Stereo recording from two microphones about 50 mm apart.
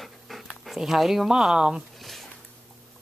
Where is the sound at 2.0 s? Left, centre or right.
Centre.